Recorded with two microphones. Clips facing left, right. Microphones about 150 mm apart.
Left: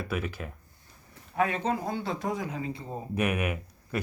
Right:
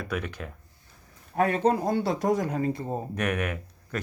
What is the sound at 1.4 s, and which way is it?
Speech, 45° right (ahead or behind).